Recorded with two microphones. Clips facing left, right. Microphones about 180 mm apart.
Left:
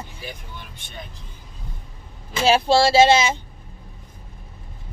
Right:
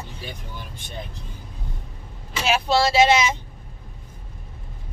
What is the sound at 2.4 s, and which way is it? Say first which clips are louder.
Speech: left 4 dB; 30° left (ahead or behind).